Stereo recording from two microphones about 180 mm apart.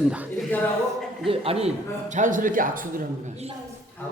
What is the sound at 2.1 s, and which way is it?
Speech, 45° right (ahead or behind).